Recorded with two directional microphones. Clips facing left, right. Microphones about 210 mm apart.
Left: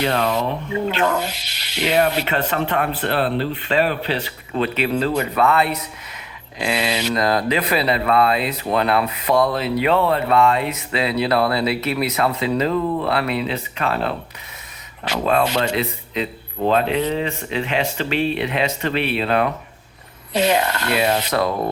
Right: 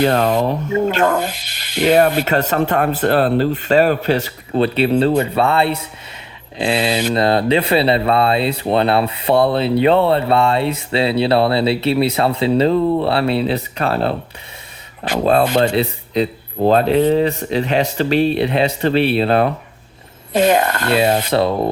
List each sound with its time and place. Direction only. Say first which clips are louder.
0.0 s speech: right 5 dB; 45° right (ahead or behind)
15.2 s speech: right 5 dB; 35° right (ahead or behind)
20.3 s speech: right 4 dB; 50° right (ahead or behind)
21.2 s speech: right 4 dB; 30° right (ahead or behind)